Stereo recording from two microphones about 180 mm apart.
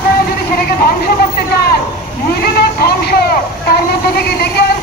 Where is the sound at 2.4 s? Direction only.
55° left (ahead or behind).